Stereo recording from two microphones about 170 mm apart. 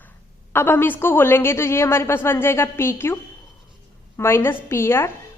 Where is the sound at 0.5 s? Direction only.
10° left (ahead or behind).